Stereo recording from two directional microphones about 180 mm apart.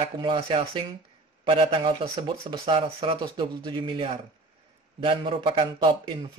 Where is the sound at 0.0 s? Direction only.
30° right (ahead or behind).